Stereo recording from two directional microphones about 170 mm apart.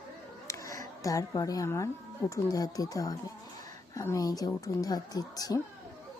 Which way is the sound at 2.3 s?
20° left (ahead or behind).